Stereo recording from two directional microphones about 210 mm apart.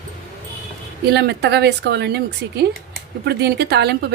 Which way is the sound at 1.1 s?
50° right (ahead or behind).